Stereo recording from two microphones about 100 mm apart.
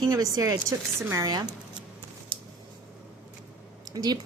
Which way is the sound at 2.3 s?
55° right (ahead or behind).